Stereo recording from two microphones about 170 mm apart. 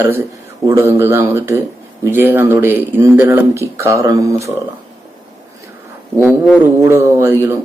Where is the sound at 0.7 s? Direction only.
15° right (ahead or behind).